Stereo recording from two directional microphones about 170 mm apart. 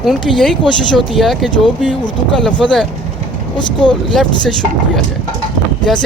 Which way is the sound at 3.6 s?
30° left (ahead or behind).